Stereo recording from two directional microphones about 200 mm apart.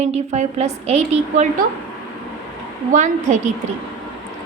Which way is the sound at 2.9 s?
40° right (ahead or behind).